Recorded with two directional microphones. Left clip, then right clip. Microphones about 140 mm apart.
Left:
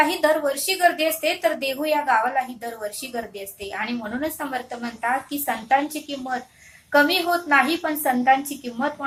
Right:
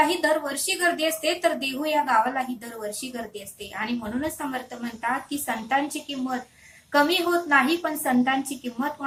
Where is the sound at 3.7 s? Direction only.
25° left (ahead or behind).